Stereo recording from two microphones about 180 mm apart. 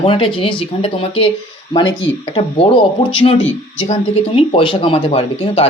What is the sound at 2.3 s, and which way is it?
Speech, 30° left (ahead or behind).